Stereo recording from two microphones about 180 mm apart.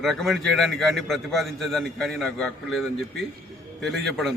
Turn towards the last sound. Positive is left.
turn(degrees=0)  # may be behind; listen again after turning